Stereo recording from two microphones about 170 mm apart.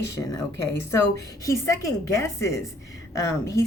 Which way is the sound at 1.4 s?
15° left (ahead or behind).